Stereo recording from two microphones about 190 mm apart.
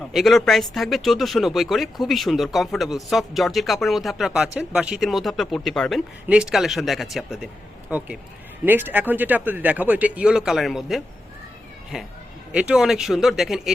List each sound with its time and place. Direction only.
0.1 s speech: centre (ahead or behind)